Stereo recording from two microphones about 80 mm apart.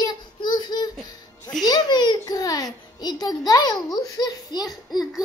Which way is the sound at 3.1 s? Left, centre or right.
Left.